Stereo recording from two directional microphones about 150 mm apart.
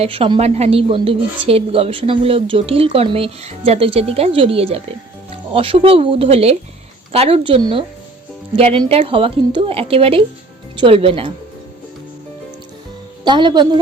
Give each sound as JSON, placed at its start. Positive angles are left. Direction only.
{"t": 0.0, "sound": "a woman's voice", "side_deg": -40}
{"t": 13.2, "sound": "a woman's voice", "side_deg": -30}